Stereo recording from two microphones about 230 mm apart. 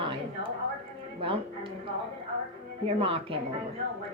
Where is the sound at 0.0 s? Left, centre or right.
Right.